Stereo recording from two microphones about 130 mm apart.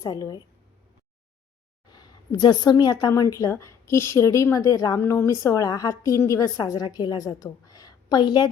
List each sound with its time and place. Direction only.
0.0 s a woman's voice: 30° left (ahead or behind)
1.9 s a woman's voice: 30° left (ahead or behind)